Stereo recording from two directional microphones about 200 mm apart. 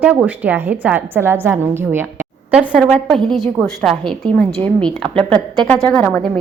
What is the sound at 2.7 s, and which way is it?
A woman's voice, 5° left (ahead or behind).